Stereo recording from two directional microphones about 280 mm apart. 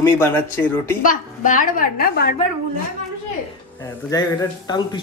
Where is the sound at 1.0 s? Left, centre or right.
Left.